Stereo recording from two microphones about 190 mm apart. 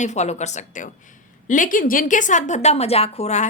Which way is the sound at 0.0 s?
35° left (ahead or behind).